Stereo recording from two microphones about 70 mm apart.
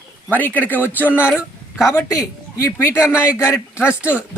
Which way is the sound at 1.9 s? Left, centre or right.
Left.